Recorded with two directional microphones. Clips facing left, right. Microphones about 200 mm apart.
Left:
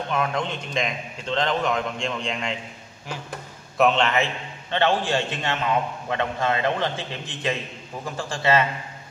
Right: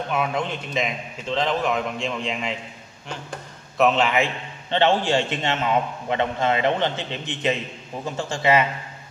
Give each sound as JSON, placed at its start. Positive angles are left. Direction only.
{"t": 0.1, "sound": "a man's voice", "side_deg": -5}
{"t": 3.7, "sound": "a man's voice", "side_deg": 0}
{"t": 4.6, "sound": "a man's voice", "side_deg": -25}